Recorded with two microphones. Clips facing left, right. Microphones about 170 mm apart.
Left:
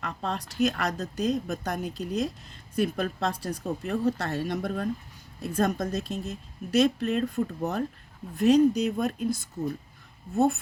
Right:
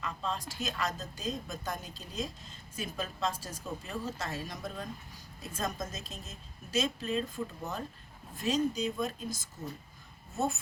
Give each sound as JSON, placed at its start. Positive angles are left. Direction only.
{"t": 0.0, "sound": "a woman's voice", "side_deg": 65}